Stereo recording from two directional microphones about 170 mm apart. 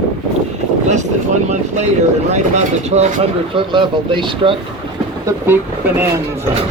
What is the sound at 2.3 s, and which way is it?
Speech, 45° right (ahead or behind).